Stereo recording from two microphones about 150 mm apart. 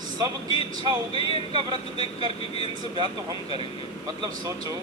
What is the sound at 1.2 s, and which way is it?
Speech, 30° right (ahead or behind).